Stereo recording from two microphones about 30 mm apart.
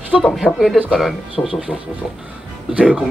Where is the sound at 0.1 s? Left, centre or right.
Left.